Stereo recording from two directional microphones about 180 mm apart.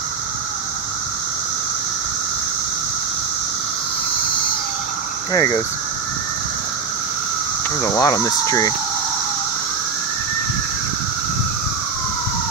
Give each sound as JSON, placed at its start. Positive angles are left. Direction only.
{"t": 5.3, "sound": "speech", "side_deg": 20}
{"t": 7.8, "sound": "speech", "side_deg": 20}